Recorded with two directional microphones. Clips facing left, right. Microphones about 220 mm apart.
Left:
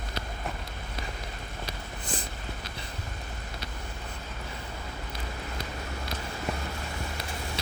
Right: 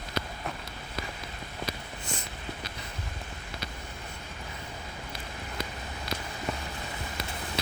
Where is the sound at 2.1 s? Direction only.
35° left (ahead or behind).